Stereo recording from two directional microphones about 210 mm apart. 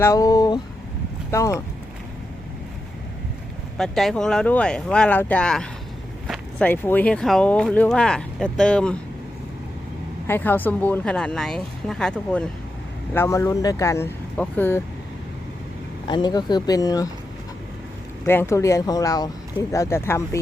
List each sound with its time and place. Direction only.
0.0 s speech: 15° left (ahead or behind)
3.8 s speech: centre (ahead or behind)
10.2 s speech: 10° left (ahead or behind)
16.0 s speech: 20° left (ahead or behind)
18.3 s speech: 10° left (ahead or behind)